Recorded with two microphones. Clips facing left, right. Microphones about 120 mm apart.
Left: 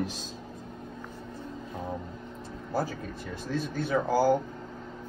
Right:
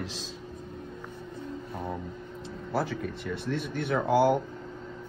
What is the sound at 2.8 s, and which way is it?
Speech, 70° right (ahead or behind).